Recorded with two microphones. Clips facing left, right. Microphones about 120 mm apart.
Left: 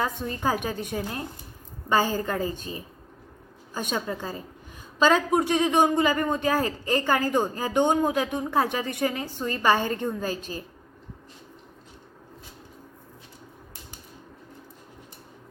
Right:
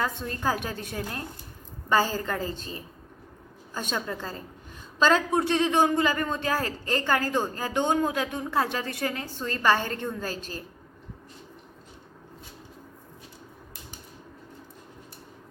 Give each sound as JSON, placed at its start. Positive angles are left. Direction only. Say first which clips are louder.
{"t": 0.0, "sound": "speech", "louder": "left 2 dB", "side_deg": 15}